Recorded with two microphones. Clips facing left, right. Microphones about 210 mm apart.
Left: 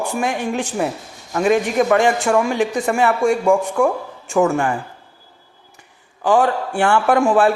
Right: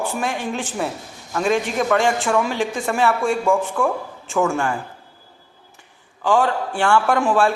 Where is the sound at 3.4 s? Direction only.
15° left (ahead or behind).